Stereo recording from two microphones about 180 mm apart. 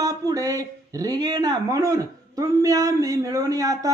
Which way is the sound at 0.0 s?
20° right (ahead or behind).